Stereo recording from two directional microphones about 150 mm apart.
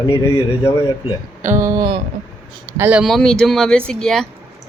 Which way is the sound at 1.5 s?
20° right (ahead or behind).